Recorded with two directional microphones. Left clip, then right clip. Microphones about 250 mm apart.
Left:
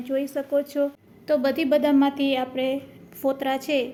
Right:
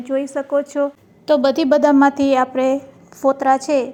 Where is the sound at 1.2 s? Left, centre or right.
Right.